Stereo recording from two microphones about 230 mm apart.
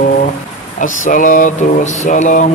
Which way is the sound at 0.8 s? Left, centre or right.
Left.